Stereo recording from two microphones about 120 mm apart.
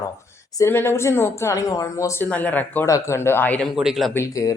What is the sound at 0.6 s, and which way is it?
Speech, 20° left (ahead or behind).